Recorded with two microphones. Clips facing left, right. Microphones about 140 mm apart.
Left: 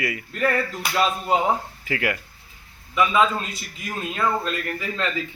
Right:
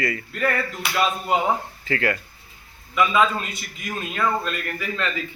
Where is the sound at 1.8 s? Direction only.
15° left (ahead or behind).